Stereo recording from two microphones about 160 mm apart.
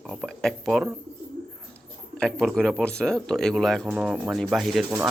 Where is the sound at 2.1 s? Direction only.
5° left (ahead or behind).